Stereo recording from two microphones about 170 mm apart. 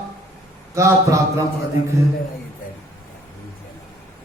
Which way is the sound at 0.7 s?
15° right (ahead or behind).